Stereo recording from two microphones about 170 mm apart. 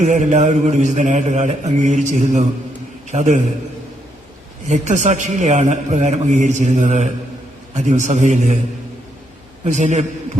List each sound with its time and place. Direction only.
0.0 s a man's voice: 45° right (ahead or behind)
4.7 s a man's voice: 45° right (ahead or behind)
9.6 s a man's voice: 45° right (ahead or behind)